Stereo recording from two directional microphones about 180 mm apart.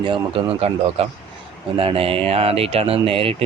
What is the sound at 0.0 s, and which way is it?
Speech, 30° right (ahead or behind).